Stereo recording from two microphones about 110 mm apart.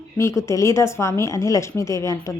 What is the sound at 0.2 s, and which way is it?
A woman's voice, 25° left (ahead or behind).